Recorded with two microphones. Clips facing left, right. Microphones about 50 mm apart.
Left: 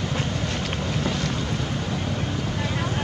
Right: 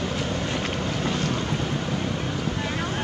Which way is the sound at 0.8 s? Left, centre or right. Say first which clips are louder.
Even; right.